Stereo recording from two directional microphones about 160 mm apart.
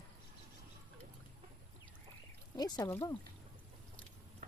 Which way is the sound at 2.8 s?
15° left (ahead or behind).